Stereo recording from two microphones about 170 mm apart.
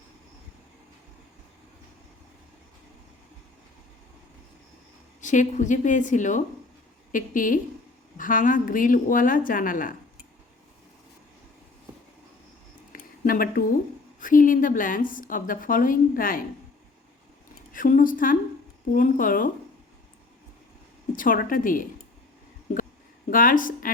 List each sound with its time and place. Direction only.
5.2 s a woman's voice: 45° left (ahead or behind)
12.9 s a sound: 55° left (ahead or behind)
14.2 s a woman's voice: 50° left (ahead or behind)
17.7 s a woman's voice: 55° left (ahead or behind)
21.1 s a woman's voice: 55° left (ahead or behind)
22.7 s a sound: 50° left (ahead or behind)
23.3 s a woman's voice: 55° left (ahead or behind)